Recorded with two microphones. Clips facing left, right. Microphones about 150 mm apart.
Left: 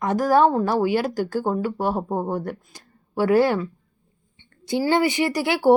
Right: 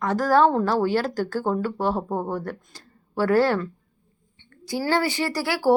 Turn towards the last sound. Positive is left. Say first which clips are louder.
# left 3 dB
turn(degrees=20)  # may be behind; listen again after turning